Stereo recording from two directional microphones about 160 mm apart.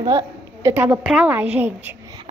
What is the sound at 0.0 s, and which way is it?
Speech, 30° right (ahead or behind).